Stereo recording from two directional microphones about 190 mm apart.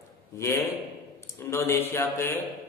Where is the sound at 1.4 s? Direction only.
15° left (ahead or behind).